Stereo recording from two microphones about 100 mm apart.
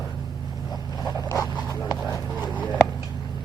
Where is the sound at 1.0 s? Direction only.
35° left (ahead or behind).